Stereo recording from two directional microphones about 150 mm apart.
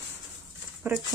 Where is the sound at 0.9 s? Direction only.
15° right (ahead or behind).